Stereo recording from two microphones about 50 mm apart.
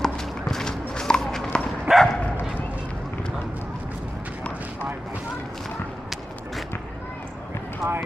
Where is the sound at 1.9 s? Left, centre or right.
Centre.